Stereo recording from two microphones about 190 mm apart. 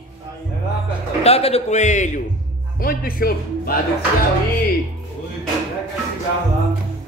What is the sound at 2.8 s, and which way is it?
Speech, 50° left (ahead or behind).